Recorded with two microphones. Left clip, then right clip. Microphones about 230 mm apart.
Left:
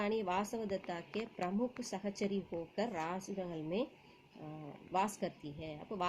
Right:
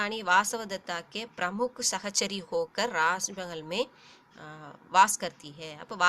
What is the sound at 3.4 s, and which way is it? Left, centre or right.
Speech, right.